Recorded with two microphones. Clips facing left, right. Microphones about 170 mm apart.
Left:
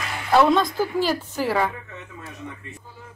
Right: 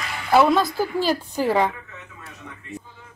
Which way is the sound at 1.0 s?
15° right (ahead or behind).